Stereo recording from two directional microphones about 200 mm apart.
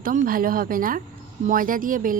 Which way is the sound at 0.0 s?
45° right (ahead or behind).